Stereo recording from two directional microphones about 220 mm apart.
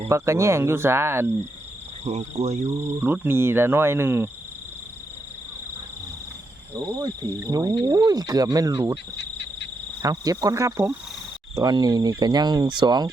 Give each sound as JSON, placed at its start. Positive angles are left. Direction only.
{"t": 0.1, "sound": "speech", "side_deg": -15}
{"t": 2.0, "sound": "speech", "side_deg": -30}
{"t": 2.6, "sound": "speech", "side_deg": -10}
{"t": 6.7, "sound": "speech", "side_deg": -15}
{"t": 9.1, "sound": "insect", "side_deg": 50}
{"t": 10.0, "sound": "speech", "side_deg": -15}